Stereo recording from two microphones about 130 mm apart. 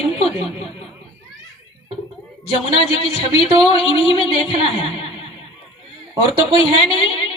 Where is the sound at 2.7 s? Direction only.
45° left (ahead or behind).